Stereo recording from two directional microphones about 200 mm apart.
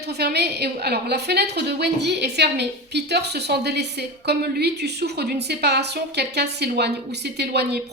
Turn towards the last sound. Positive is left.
turn(degrees=-55)  # may be behind; listen again after turning